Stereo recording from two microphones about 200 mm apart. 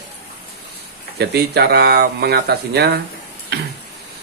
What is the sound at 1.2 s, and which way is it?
Speech, 55° right (ahead or behind).